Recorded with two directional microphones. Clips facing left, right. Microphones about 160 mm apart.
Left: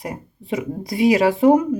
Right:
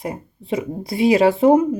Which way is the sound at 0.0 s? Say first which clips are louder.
Right 2 dB; 25° right (ahead or behind).